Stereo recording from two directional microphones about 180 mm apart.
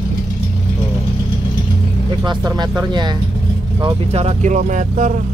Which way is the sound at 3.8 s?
35° right (ahead or behind).